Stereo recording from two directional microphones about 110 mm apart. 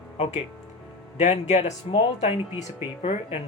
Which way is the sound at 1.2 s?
90° left.